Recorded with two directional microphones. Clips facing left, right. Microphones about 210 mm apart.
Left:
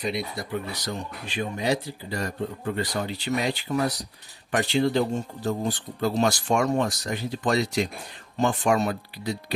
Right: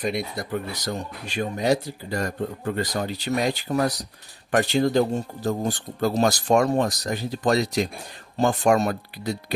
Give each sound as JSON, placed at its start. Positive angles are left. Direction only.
{"t": 0.0, "sound": "speech", "side_deg": -50}